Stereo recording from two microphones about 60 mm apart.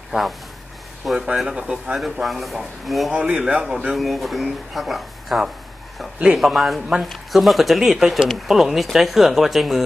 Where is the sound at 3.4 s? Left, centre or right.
Centre.